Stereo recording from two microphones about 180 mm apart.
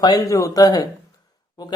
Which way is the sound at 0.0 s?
20° left (ahead or behind).